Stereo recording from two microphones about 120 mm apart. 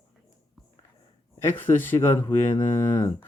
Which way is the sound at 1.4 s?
20° left (ahead or behind).